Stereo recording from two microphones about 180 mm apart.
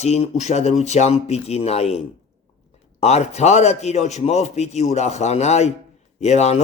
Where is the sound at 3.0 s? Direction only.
35° left (ahead or behind).